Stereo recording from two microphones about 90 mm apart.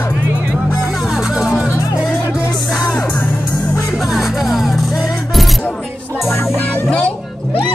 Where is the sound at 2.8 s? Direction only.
15° left (ahead or behind).